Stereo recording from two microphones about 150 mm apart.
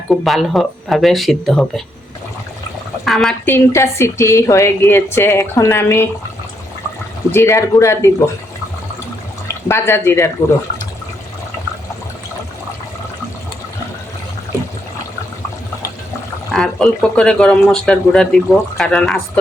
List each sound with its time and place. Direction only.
0.1 s speech: centre (ahead or behind)
3.0 s speech: centre (ahead or behind)
3.4 s a woman's voice: 15° left (ahead or behind)
7.3 s a woman's voice: 15° left (ahead or behind)
9.6 s a woman's voice: 15° left (ahead or behind)
16.5 s speech: 5° left (ahead or behind)